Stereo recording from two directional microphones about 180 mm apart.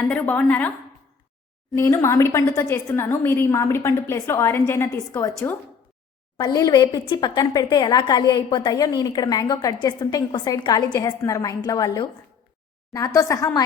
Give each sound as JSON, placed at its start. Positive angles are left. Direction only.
{"t": 0.1, "sound": "a woman's voice", "side_deg": 10}
{"t": 1.7, "sound": "a woman's voice", "side_deg": 15}
{"t": 6.3, "sound": "a woman's voice", "side_deg": 20}